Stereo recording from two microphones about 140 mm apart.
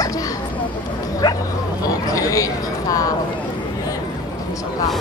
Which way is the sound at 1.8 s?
25° left (ahead or behind).